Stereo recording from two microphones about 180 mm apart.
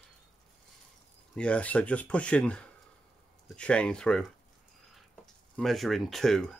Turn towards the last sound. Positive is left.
turn(degrees=0)  # may be behind; listen again after turning